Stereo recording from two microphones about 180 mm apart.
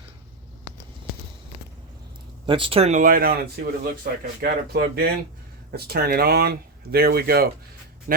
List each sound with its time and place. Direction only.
2.5 s speech: 30° right (ahead or behind); by 7.4 s 60° right (ahead or behind)